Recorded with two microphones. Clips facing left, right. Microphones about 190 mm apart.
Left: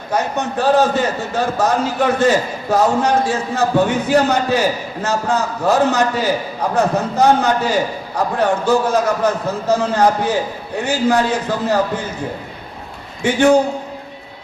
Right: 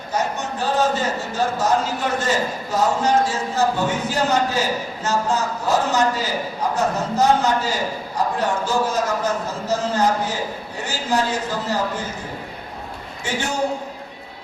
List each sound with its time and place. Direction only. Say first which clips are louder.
0.1 s a man's voice: left 5 dB; 60° left (ahead or behind)
13.2 s a man's voice: left 14 dB; 60° left (ahead or behind)